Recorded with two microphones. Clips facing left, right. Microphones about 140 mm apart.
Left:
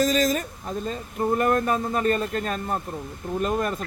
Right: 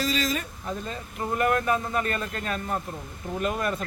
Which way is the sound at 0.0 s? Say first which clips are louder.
Left 6 dB; 45° left (ahead or behind).